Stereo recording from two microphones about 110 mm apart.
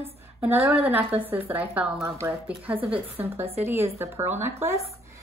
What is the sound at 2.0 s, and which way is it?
Speech, 25° right (ahead or behind).